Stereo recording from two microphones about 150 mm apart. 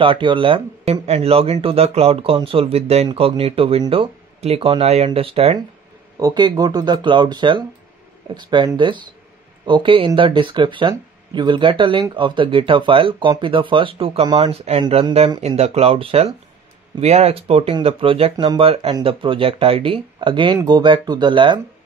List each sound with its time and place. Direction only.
0.0 s speech: 35° right (ahead or behind)
6.1 s speech: 25° right (ahead or behind)
18.3 s speech: 30° right (ahead or behind)